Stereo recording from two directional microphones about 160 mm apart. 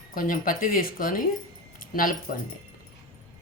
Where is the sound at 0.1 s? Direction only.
60° left (ahead or behind).